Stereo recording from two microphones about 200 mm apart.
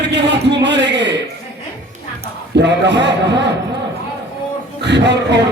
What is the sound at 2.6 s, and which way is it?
Speech, 60° right (ahead or behind).